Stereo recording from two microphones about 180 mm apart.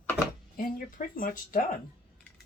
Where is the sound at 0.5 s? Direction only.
50° left (ahead or behind).